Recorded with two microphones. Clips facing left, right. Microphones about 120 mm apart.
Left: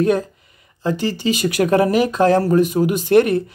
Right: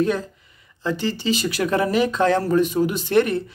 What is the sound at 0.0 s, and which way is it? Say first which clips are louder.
Speech: left 4 dB; 55° left (ahead or behind).